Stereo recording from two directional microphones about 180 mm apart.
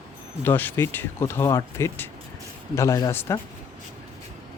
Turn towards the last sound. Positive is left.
turn(degrees=15)  # may be behind; listen again after turning